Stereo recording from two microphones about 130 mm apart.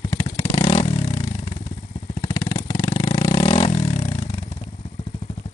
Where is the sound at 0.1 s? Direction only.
35° left (ahead or behind).